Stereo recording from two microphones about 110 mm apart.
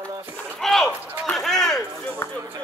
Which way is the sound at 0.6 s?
Centre (ahead or behind).